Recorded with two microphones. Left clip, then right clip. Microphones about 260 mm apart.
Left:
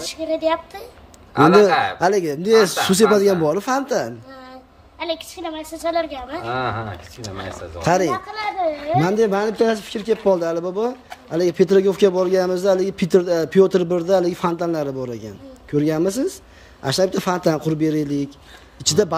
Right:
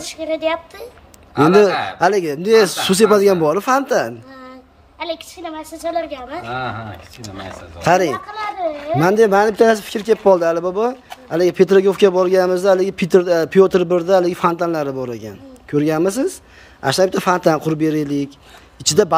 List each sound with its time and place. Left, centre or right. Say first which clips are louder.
0.0 s a man's voice: right 1 dB; centre
9.1 s a man's voice: right 6 dB; centre